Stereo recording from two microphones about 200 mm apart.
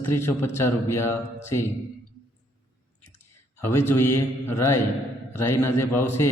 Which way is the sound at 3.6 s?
10° left (ahead or behind).